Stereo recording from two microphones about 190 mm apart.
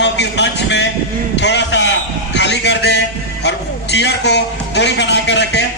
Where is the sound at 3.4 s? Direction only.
65° left (ahead or behind).